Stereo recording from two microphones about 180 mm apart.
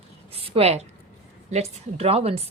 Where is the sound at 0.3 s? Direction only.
30° right (ahead or behind).